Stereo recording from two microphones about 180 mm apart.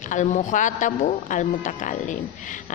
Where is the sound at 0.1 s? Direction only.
45° left (ahead or behind).